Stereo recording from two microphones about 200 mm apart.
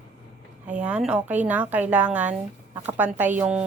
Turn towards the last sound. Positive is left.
turn(degrees=-5)  # may be behind; listen again after turning